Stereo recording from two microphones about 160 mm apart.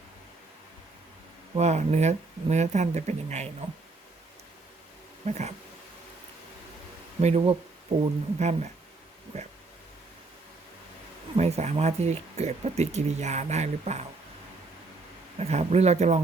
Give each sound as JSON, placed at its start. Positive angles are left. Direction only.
{"t": 1.5, "sound": "speech", "side_deg": -45}
{"t": 5.2, "sound": "speech", "side_deg": -45}
{"t": 7.2, "sound": "speech", "side_deg": -45}
{"t": 11.3, "sound": "speech", "side_deg": -45}
{"t": 15.4, "sound": "speech", "side_deg": -40}